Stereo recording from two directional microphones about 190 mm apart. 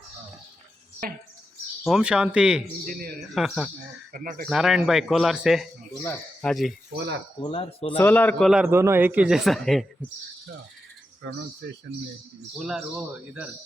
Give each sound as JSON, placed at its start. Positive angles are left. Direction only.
{"t": 1.0, "sound": "speech", "side_deg": -50}
{"t": 1.9, "sound": "a man's voice", "side_deg": -5}
{"t": 2.8, "sound": "speech", "side_deg": -50}
{"t": 3.3, "sound": "a man's voice", "side_deg": 0}
{"t": 4.1, "sound": "speech", "side_deg": -50}
{"t": 4.4, "sound": "a man's voice", "side_deg": -5}
{"t": 7.4, "sound": "speech", "side_deg": 30}
{"t": 7.9, "sound": "a man's voice", "side_deg": 10}
{"t": 11.2, "sound": "speech", "side_deg": -65}
{"t": 12.5, "sound": "a man's voice", "side_deg": 0}